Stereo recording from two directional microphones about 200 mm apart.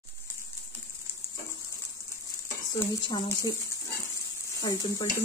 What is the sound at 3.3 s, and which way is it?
Speech, 15° left (ahead or behind).